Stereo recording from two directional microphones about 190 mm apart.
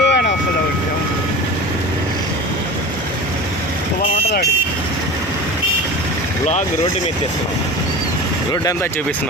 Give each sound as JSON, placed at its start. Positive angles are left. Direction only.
{"t": 0.0, "sound": "vehicle", "side_deg": 60}